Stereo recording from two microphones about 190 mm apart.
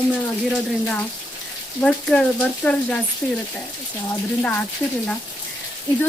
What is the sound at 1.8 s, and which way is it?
Speech, 5° left (ahead or behind).